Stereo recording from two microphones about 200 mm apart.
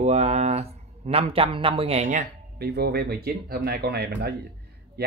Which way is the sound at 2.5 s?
55° right (ahead or behind).